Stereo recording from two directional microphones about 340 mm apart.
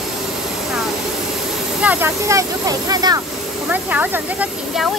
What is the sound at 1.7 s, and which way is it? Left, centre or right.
Speech, centre.